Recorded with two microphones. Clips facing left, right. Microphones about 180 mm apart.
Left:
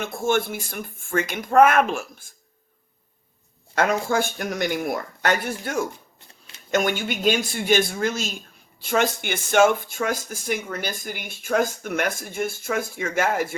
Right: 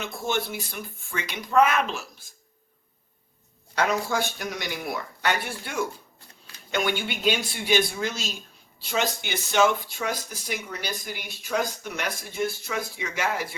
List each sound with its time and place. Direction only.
0.0 s speech: 50° left (ahead or behind)
3.8 s speech: 50° left (ahead or behind)